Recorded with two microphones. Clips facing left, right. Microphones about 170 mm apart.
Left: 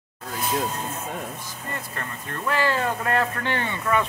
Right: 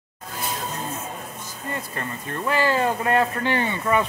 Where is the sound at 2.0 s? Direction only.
15° right (ahead or behind).